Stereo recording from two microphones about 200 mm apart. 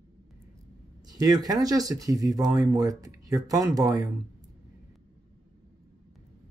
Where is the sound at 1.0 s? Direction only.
20° right (ahead or behind).